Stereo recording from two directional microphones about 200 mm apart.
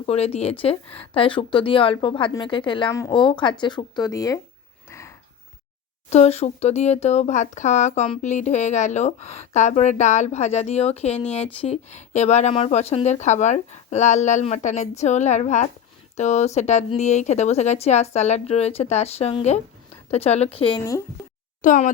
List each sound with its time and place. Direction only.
0.0 s a woman's voice: 30° left (ahead or behind)
4.9 s a sound: 15° left (ahead or behind)
6.1 s a woman's voice: 30° left (ahead or behind)
21.6 s speech: 40° left (ahead or behind)